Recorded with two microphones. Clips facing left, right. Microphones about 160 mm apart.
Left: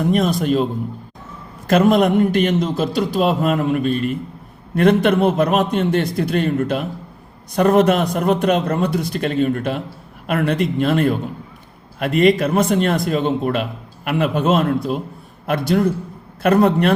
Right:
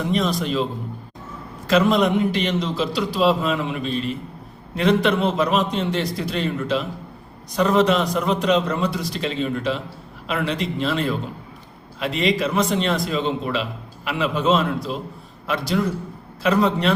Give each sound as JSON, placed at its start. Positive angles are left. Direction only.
{"t": 0.0, "sound": "a man's voice", "side_deg": 50}